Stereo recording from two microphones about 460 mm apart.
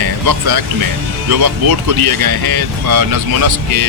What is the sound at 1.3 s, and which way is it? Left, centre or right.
Speech, right.